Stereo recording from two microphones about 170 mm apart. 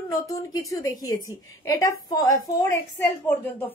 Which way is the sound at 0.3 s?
20° left (ahead or behind).